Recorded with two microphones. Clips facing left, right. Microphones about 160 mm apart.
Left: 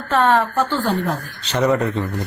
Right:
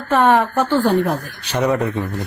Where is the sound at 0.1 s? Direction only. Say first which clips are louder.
Right 2 dB; 15° right (ahead or behind).